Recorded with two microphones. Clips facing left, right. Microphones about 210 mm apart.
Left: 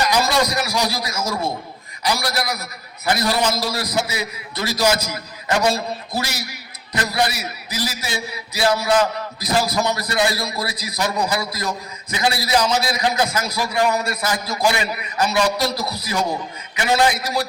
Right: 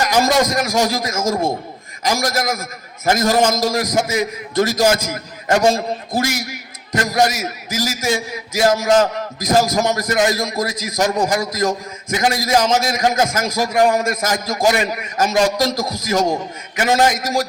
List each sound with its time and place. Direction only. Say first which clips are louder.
0.0 s a man's voice: right 3 dB; 45° right (ahead or behind)